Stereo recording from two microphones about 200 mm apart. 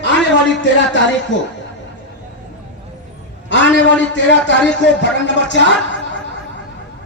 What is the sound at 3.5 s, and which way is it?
A man's voice, 65° left (ahead or behind).